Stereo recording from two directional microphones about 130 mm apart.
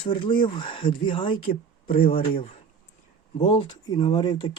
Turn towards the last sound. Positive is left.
turn(degrees=35)  # may be behind; listen again after turning